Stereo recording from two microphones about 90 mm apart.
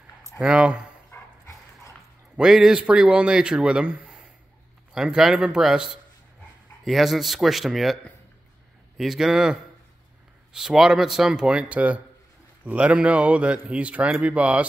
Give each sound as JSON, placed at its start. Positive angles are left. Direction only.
{"t": 0.4, "sound": "speech", "side_deg": -10}
{"t": 1.1, "sound": "dog", "side_deg": 30}
{"t": 2.3, "sound": "speech", "side_deg": -5}